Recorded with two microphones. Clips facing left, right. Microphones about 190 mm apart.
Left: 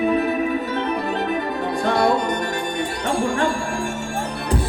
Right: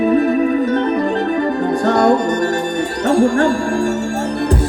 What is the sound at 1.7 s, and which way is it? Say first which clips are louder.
Music: right 5 dB; 45° right (ahead or behind).